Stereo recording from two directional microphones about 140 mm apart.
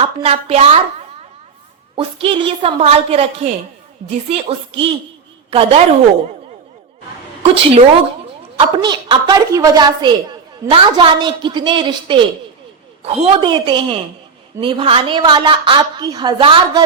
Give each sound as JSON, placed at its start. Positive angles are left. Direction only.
{"t": 0.0, "sound": "a woman's voice", "side_deg": -45}
{"t": 7.4, "sound": "a woman's voice", "side_deg": -45}
{"t": 8.5, "sound": "a woman's voice", "side_deg": -35}
{"t": 13.0, "sound": "a woman's voice", "side_deg": -45}
{"t": 13.4, "sound": "a woman's voice", "side_deg": -35}